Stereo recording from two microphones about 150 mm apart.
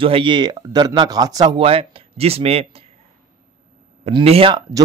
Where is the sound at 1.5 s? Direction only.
40° right (ahead or behind).